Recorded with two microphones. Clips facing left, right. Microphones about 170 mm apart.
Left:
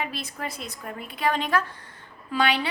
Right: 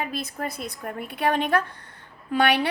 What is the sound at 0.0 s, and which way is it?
A woman's voice, 45° right (ahead or behind).